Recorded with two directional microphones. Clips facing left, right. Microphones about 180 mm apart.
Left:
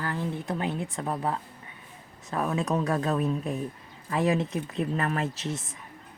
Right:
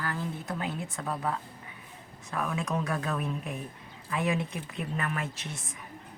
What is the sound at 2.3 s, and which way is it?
Speech, 35° left (ahead or behind).